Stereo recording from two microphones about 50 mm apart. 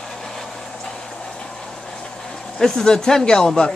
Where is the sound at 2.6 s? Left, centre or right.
Centre.